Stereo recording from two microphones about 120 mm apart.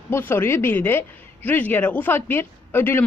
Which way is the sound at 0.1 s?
20° left (ahead or behind).